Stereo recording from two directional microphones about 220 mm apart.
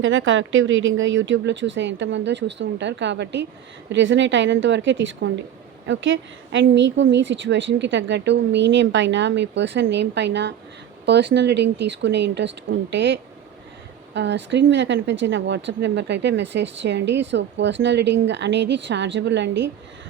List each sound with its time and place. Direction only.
0.0 s a woman's voice: 60° right (ahead or behind)